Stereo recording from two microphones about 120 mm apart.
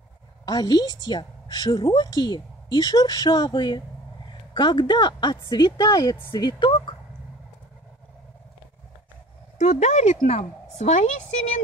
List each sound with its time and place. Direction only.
0.5 s speech: 30° left (ahead or behind)
6.3 s speech: 40° left (ahead or behind)
9.6 s a woman's voice: 70° left (ahead or behind)